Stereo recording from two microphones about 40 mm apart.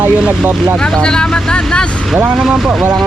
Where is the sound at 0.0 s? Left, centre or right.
Right.